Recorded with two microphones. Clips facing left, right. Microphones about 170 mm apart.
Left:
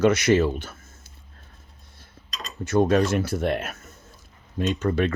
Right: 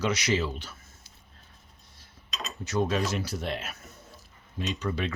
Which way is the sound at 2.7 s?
55° left (ahead or behind).